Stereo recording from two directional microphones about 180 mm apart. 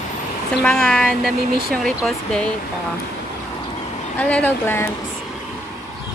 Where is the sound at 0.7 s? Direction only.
5° left (ahead or behind).